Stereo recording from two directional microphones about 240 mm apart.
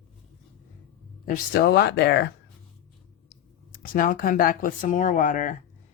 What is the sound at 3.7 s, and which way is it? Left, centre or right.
A man's voice, left.